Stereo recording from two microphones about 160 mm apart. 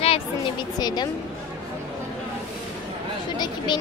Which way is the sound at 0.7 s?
25° left (ahead or behind).